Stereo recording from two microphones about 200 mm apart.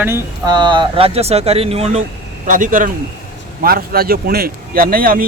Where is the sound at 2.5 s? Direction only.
40° right (ahead or behind).